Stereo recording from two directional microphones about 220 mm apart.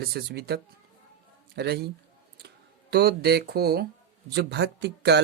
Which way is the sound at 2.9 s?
50° right (ahead or behind).